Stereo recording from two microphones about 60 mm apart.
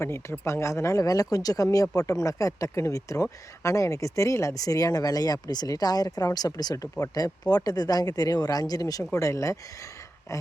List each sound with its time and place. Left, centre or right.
0.0 s speech: left
9.1 s speech: left